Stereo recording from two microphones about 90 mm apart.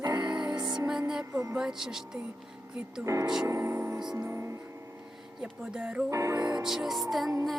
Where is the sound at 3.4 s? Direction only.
30° right (ahead or behind).